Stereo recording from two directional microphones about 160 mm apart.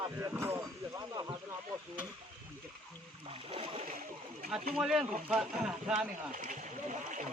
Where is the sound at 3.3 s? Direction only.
35° right (ahead or behind).